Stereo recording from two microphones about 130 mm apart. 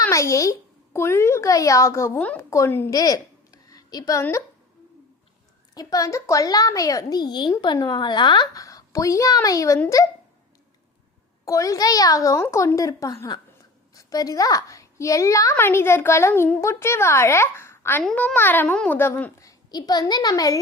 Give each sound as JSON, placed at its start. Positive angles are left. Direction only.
{"t": 0.0, "sound": "a child's voice", "side_deg": 25}
{"t": 2.9, "sound": "a sound", "side_deg": 30}
{"t": 5.7, "sound": "a child's voice", "side_deg": 30}
{"t": 8.6, "sound": "speech", "side_deg": 25}
{"t": 11.4, "sound": "a child's voice", "side_deg": 25}
{"t": 18.0, "sound": "a child's voice", "side_deg": 5}